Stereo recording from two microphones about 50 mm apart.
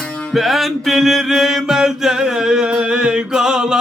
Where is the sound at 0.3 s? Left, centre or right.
Centre.